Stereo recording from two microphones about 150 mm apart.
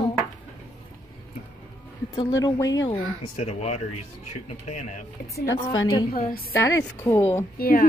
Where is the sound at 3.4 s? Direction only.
45° left (ahead or behind).